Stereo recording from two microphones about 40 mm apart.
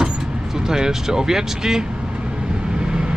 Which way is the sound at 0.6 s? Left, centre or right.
Centre.